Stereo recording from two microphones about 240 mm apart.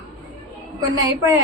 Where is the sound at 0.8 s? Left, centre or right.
Centre.